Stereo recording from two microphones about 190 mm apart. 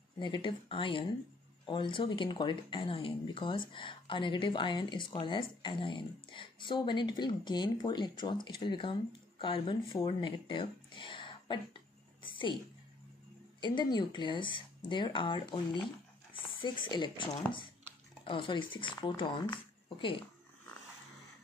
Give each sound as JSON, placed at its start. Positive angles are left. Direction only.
{"t": 0.2, "sound": "speech", "side_deg": 25}
{"t": 13.6, "sound": "speech", "side_deg": 25}